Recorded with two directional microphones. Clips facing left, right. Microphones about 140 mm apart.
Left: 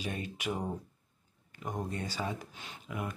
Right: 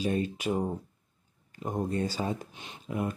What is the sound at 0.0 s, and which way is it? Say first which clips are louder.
Speech: right 8 dB; 35° right (ahead or behind).